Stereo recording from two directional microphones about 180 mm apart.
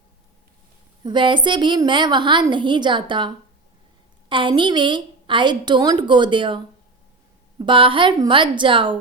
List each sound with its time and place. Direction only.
1.0 s a woman's voice: 25° right (ahead or behind)
7.6 s a woman's voice: 30° right (ahead or behind)